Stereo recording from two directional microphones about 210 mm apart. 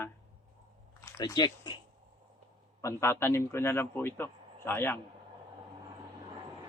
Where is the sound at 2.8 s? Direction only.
15° left (ahead or behind).